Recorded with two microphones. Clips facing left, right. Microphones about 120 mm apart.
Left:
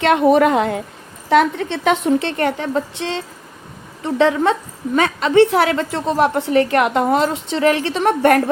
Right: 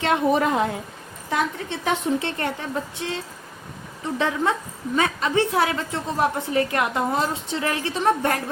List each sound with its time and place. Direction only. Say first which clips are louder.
0.0 s a woman's voice: left 7 dB; 75° left (ahead or behind)